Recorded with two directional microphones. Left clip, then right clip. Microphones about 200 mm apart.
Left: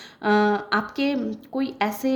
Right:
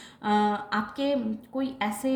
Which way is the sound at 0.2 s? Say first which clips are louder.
Left 5 dB; 40° left (ahead or behind).